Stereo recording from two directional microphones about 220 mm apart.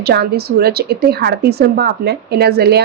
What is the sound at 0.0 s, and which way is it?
Speech, 45° right (ahead or behind).